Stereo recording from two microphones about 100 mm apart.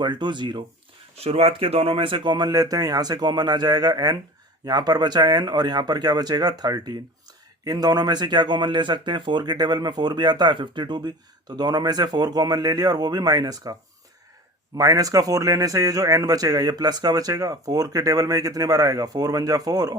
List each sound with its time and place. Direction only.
0.0 s speech: 50° right (ahead or behind)
1.1 s speech: 90° right; by 13.7 s 40° right (ahead or behind)
14.8 s speech: 35° right (ahead or behind)